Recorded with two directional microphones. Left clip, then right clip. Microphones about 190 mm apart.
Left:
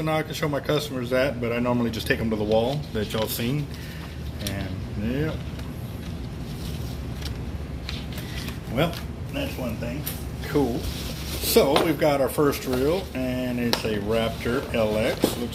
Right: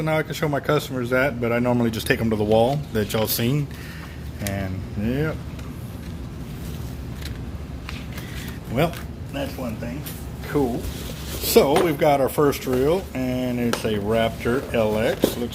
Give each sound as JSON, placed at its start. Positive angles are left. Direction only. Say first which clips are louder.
{"t": 0.0, "sound": "a man's voice", "louder": "right 2 dB", "side_deg": -55}
{"t": 5.0, "sound": "a man's voice", "louder": "right 3 dB", "side_deg": -55}
{"t": 8.8, "sound": "speech", "louder": "right 2 dB", "side_deg": -50}
{"t": 10.5, "sound": "speech", "louder": "right 1 dB", "side_deg": -40}
{"t": 11.4, "sound": "speech", "louder": "right 2 dB", "side_deg": -50}